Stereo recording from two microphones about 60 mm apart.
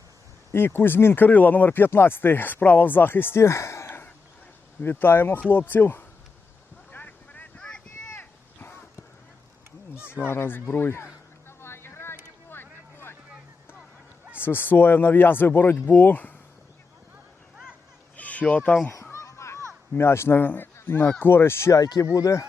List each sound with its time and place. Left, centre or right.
0.5 s speech: left
3.8 s cough: left
4.8 s speech: left
6.9 s vehicle: left
8.1 s a sound: left
10.1 s a sound: left
14.4 s speech: left
18.2 s a sound: left
19.1 s children playing: left
20.0 s speech: left
20.4 s speech: left
21.8 s speech: left